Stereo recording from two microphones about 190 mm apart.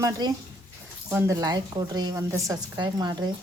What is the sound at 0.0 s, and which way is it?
A woman's voice, 20° right (ahead or behind).